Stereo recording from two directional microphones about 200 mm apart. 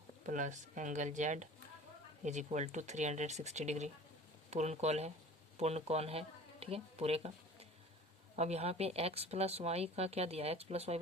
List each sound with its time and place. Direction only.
0.3 s speech: 40° right (ahead or behind)
8.4 s speech: 30° right (ahead or behind)